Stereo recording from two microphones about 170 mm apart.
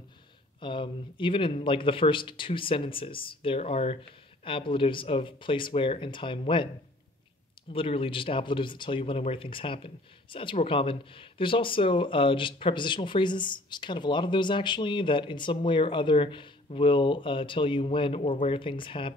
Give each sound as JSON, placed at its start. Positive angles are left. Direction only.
{"t": 0.6, "sound": "speech", "side_deg": 30}
{"t": 7.7, "sound": "speech", "side_deg": 30}